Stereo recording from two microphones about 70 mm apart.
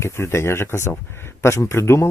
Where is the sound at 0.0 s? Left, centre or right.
Left.